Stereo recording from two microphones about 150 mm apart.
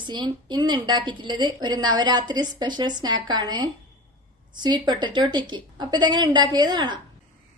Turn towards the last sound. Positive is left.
turn(degrees=-30)  # may be behind; listen again after turning